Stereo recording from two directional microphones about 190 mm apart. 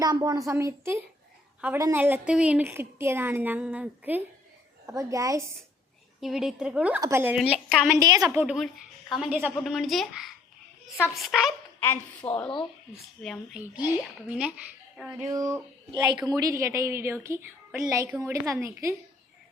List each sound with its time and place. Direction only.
0.0 s a woman's voice: 20° right (ahead or behind)
6.1 s a woman's voice: centre (ahead or behind)
7.3 s a woman's voice: centre (ahead or behind)
7.9 s speech: 20° right (ahead or behind)
8.3 s a woman's voice: 5° right (ahead or behind)
12.2 s speech: 15° left (ahead or behind)
13.2 s a woman's voice: 5° left (ahead or behind)
14.2 s a woman's voice: 5° right (ahead or behind)
15.3 s a woman's voice: 20° right (ahead or behind)